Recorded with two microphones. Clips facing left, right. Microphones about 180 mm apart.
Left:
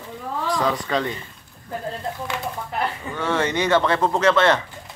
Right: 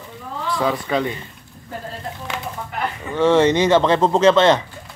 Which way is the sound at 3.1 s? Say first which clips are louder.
Right 10 dB; 20° right (ahead or behind).